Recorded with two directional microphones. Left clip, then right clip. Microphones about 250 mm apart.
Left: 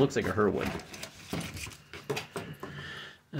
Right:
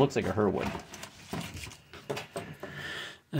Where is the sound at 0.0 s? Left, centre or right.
Right.